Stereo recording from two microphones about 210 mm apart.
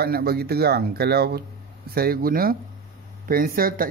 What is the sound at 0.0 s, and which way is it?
Speech, 45° right (ahead or behind).